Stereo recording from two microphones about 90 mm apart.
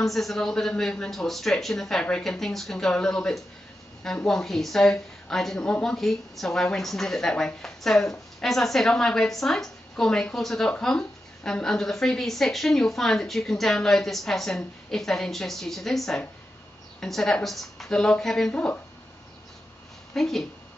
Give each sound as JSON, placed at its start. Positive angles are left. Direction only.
{"t": 0.0, "sound": "a woman's voice", "side_deg": 0}
{"t": 20.2, "sound": "a woman's voice", "side_deg": 5}